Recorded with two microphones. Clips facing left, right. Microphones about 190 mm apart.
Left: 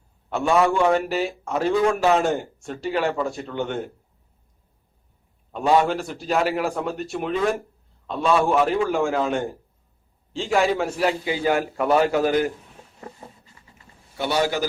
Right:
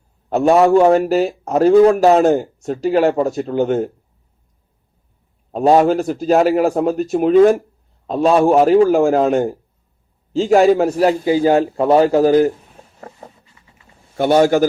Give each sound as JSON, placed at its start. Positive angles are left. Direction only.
{"t": 0.3, "sound": "a man's voice", "side_deg": -40}
{"t": 5.5, "sound": "a man's voice", "side_deg": -40}
{"t": 14.2, "sound": "a man's voice", "side_deg": -50}